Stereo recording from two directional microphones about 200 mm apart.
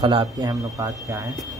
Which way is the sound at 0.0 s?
25° right (ahead or behind).